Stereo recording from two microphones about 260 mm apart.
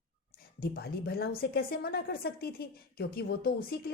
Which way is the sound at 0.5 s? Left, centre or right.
Left.